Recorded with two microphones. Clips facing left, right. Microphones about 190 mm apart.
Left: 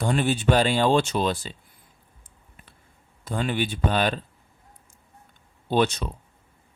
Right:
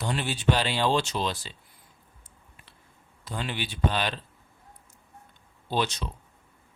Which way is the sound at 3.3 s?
50° left (ahead or behind).